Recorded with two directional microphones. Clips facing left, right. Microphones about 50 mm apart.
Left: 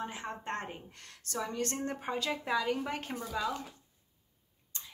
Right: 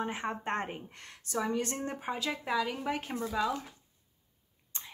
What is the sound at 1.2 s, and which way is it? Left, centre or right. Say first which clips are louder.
A woman's voice: right 3 dB; centre.